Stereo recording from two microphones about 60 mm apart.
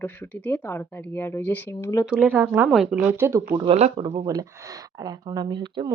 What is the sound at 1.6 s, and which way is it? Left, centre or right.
Speech, left.